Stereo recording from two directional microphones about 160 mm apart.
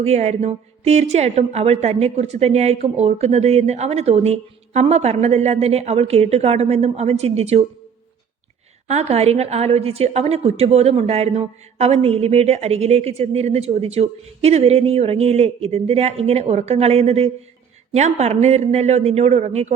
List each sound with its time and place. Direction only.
0.0 s a woman's voice: 45° right (ahead or behind)
8.9 s a woman's voice: 40° right (ahead or behind)